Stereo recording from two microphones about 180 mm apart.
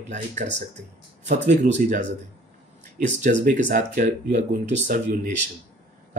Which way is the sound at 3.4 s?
45° right (ahead or behind).